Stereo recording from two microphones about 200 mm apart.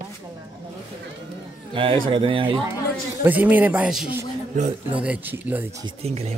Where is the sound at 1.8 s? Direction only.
25° right (ahead or behind).